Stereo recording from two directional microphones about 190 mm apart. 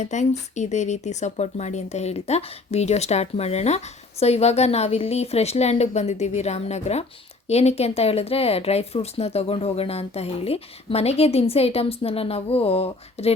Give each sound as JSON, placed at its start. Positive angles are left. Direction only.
{"t": 0.0, "sound": "speech", "side_deg": 40}